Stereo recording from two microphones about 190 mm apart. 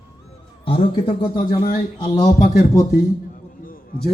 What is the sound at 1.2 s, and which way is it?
Speech, 25° left (ahead or behind).